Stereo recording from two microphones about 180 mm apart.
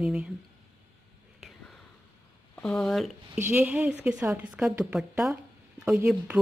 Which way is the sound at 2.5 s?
Centre (ahead or behind).